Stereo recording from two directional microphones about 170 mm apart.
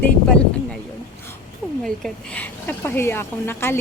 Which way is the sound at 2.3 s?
10° left (ahead or behind).